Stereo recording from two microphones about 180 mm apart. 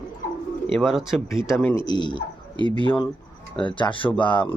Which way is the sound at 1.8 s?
25° left (ahead or behind).